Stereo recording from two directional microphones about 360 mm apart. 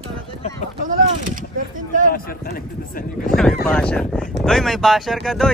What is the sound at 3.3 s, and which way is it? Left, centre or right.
Speech, centre.